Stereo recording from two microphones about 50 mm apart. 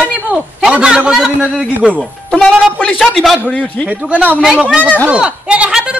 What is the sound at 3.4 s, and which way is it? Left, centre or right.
Speech, left.